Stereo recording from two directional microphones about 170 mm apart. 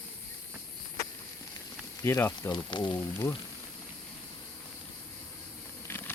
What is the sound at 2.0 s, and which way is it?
Speech, 15° left (ahead or behind).